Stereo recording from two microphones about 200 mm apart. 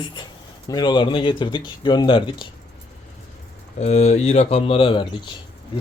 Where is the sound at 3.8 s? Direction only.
35° left (ahead or behind).